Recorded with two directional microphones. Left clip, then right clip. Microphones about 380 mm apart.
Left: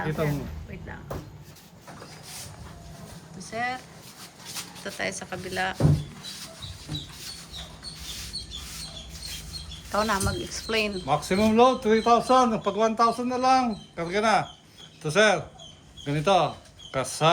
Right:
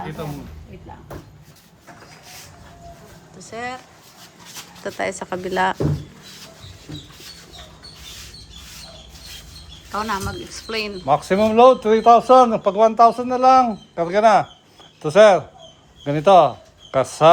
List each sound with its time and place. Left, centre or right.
0.0 s a sound: centre
3.3 s speech: centre
4.8 s speech: centre
9.9 s speech: centre
11.0 s a man's voice: right